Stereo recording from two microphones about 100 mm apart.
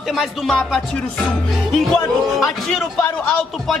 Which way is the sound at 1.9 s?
Centre (ahead or behind).